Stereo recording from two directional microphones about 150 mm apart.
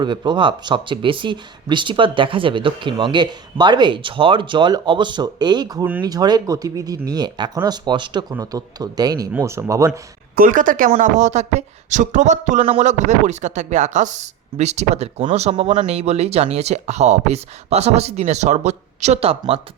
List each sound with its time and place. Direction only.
0.0 s speech: 30° right (ahead or behind)
10.3 s speech: 65° right (ahead or behind); by 19.4 s 45° right (ahead or behind)